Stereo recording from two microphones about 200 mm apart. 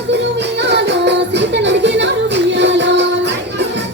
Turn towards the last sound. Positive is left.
turn(degrees=-60)  # may be behind; listen again after turning